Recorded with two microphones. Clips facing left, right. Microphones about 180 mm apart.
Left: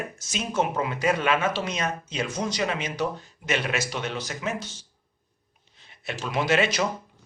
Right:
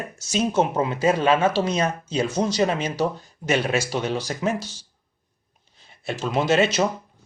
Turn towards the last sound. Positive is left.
turn(degrees=-25)  # may be behind; listen again after turning